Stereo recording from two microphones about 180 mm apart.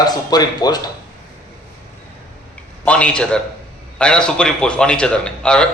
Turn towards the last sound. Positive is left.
turn(degrees=5)  # may be behind; listen again after turning